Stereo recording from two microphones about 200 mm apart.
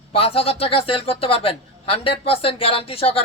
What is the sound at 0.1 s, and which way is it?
A man's voice, 30° left (ahead or behind).